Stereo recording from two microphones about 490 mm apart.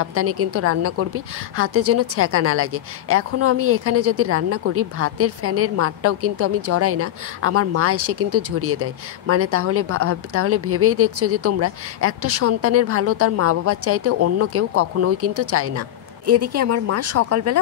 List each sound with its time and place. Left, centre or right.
0.0 s a woman's voice: right